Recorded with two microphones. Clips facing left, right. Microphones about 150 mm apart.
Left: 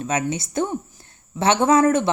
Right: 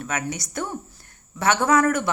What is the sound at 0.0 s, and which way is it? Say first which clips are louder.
A woman's voice: left 5 dB; 20° left (ahead or behind).